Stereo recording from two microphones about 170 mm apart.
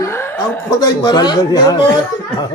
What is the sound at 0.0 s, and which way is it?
Chuckle, 15° left (ahead or behind).